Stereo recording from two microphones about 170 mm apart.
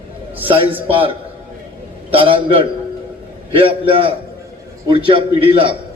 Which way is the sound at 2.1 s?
30° right (ahead or behind).